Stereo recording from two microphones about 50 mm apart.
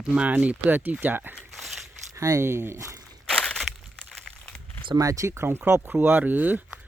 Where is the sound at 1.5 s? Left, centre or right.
Centre.